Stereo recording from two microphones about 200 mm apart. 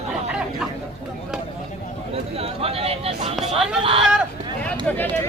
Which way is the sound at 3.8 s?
25° right (ahead or behind).